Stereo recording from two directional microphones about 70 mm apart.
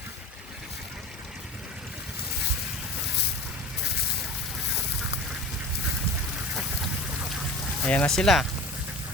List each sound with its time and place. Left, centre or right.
7.9 s speech: centre
8.1 s speech: centre